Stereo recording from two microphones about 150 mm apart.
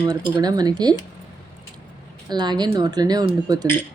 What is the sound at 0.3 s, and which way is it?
Speech, 25° right (ahead or behind).